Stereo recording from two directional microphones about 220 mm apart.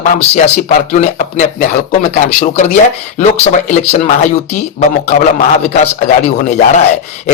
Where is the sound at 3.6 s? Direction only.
30° left (ahead or behind).